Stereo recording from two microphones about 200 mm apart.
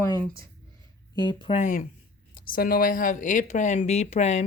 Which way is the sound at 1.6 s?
40° left (ahead or behind).